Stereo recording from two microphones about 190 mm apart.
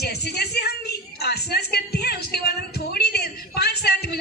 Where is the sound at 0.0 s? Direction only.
55° left (ahead or behind).